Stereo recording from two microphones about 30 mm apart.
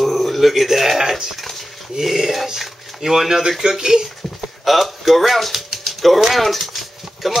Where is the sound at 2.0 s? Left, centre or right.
Centre.